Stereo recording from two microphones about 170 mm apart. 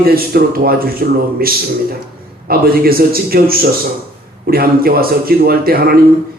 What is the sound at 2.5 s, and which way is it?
A man's voice, 60° right (ahead or behind).